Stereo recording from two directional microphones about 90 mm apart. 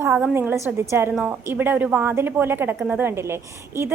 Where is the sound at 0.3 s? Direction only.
30° right (ahead or behind).